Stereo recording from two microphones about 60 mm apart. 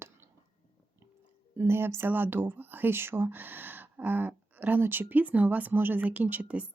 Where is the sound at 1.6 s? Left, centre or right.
Right.